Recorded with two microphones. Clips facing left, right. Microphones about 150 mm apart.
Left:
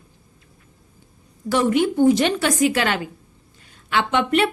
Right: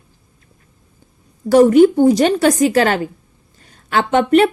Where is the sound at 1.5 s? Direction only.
40° right (ahead or behind).